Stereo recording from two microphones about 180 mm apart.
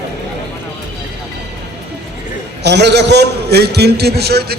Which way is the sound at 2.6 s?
70° right (ahead or behind).